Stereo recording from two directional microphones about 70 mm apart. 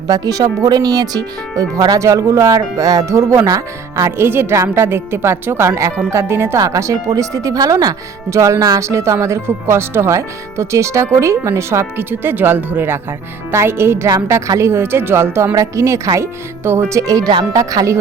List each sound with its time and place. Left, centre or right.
0.1 s speech: right
6.6 s speech: right
8.3 s speech: right
8.8 s speech: right
12.2 s speech: right
14.1 s speech: right
15.5 s speech: right
16.6 s speech: right
17.0 s speech: right